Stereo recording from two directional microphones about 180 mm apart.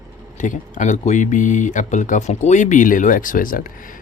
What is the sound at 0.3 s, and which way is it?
Speech, 45° left (ahead or behind).